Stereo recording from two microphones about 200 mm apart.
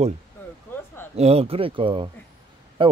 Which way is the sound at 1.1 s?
30° right (ahead or behind).